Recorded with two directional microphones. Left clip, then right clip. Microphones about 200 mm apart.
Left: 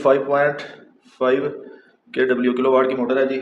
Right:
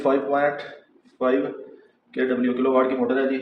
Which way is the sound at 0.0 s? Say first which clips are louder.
Left 4 dB; 40° left (ahead or behind).